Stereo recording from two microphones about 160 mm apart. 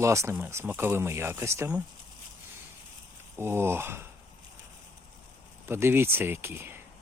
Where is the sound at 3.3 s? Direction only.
15° right (ahead or behind).